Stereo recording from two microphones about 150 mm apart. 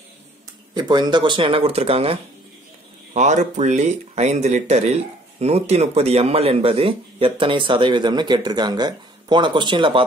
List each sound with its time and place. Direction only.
0.7 s speech: 30° right (ahead or behind)